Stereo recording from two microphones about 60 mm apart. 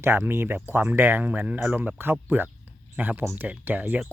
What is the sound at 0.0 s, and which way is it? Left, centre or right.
Speech, right.